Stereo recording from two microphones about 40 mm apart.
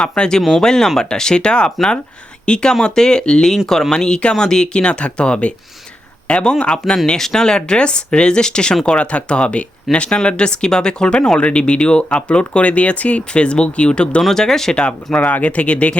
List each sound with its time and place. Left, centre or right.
0.2 s speech: centre
3.7 s speech: centre; by 14.2 s left
14.2 s speech: centre
14.8 s speech: left